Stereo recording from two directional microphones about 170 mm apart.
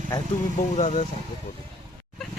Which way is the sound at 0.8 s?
45° left (ahead or behind).